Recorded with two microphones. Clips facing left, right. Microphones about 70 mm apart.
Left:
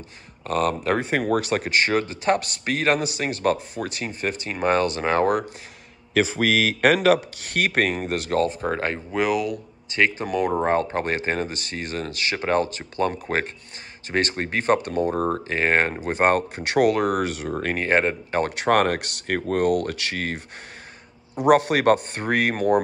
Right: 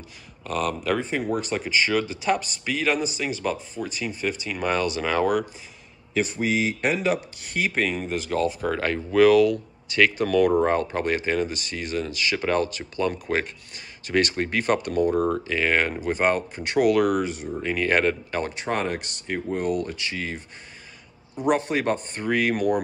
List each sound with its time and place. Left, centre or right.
0.4 s speech: left
1.3 s a man's voice: left
4.0 s speech: left
6.1 s speech: left
8.6 s speech: left
10.7 s speech: left
12.4 s speech: left
16.9 s speech: left
17.2 s a man's voice: left
17.7 s speech: left
18.5 s a man's voice: left
21.5 s a man's voice: left